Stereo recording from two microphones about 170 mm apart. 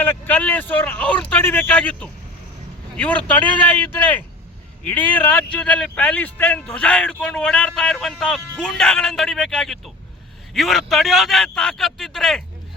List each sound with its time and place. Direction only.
0.0 s speech: 10° left (ahead or behind)